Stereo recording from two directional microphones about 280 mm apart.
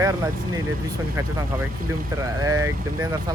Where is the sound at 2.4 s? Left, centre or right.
Centre.